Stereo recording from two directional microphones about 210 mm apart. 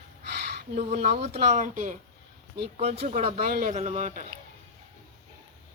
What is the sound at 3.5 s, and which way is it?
Speech, 45° right (ahead or behind).